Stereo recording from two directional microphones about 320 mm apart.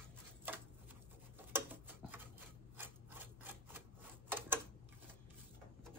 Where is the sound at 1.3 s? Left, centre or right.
Centre.